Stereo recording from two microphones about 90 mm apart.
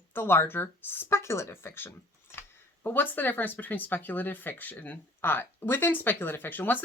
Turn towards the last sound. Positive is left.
turn(degrees=20)  # may be behind; listen again after turning